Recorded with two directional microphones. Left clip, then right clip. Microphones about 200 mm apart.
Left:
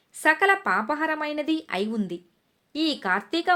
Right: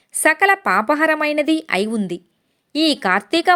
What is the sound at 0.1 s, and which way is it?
Speech, 35° right (ahead or behind).